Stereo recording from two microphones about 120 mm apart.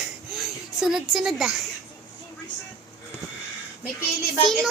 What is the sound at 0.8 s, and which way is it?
Speech, 5° right (ahead or behind).